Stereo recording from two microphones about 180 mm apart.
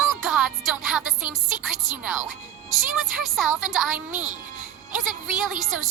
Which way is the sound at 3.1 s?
Centre (ahead or behind).